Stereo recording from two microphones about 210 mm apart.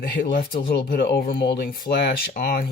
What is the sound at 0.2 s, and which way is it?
Speech, 45° left (ahead or behind).